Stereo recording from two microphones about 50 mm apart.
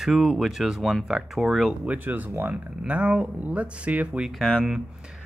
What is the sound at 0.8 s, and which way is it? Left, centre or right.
Speech, centre.